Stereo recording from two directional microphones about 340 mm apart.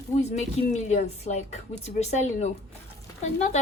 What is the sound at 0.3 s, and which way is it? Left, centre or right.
A woman's voice, centre.